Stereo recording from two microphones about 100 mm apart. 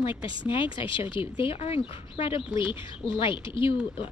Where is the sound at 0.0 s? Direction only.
55° left (ahead or behind).